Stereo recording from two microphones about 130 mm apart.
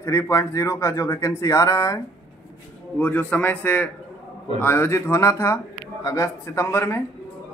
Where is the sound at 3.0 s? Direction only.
10° left (ahead or behind).